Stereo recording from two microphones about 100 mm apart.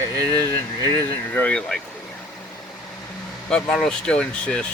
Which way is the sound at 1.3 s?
15° left (ahead or behind).